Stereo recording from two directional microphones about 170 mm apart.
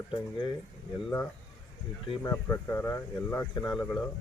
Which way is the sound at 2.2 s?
10° left (ahead or behind).